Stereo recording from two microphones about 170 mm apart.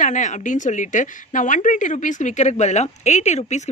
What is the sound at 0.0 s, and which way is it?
A woman's voice, 45° left (ahead or behind).